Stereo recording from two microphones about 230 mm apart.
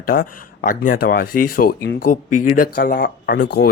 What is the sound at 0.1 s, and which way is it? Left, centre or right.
Speech, left.